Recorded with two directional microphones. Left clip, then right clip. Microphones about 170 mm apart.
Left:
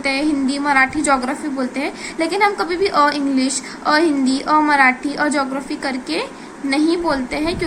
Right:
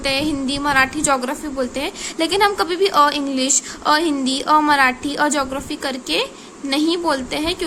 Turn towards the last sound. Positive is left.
turn(degrees=-50)  # may be behind; listen again after turning